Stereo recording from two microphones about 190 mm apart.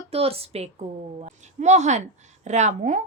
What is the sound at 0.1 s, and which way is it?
A woman's voice, 30° right (ahead or behind).